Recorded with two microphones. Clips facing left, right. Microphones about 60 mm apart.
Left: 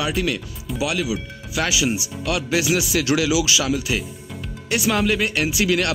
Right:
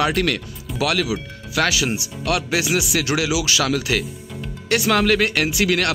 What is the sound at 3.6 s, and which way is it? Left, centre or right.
Speech, right.